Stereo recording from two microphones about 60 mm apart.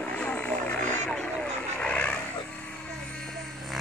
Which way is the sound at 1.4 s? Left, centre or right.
Centre.